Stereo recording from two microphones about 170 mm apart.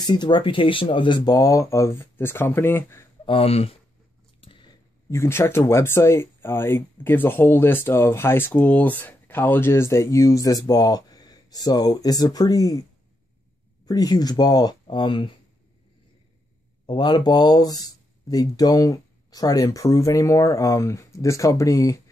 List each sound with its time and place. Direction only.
0.0 s speech: 25° left (ahead or behind)
3.3 s speech: 35° left (ahead or behind)
4.4 s biting: 30° left (ahead or behind)
5.1 s speech: 15° left (ahead or behind)
13.8 s speech: 20° left (ahead or behind)
16.8 s speech: 25° left (ahead or behind)